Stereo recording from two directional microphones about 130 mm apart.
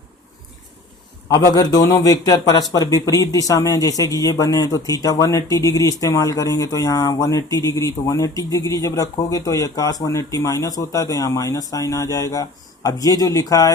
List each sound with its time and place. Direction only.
1.3 s speech: 30° left (ahead or behind)